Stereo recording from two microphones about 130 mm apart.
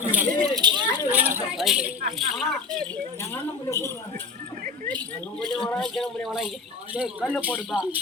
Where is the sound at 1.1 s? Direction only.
15° right (ahead or behind).